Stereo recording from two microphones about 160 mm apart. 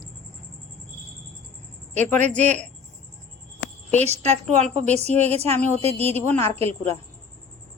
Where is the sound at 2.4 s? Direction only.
45° right (ahead or behind).